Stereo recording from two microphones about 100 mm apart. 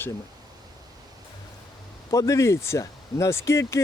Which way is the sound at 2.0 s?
35° left (ahead or behind).